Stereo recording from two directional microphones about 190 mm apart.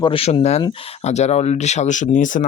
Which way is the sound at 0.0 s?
30° left (ahead or behind).